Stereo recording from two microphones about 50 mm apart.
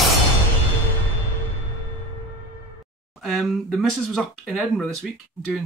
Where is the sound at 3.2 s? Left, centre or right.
Centre.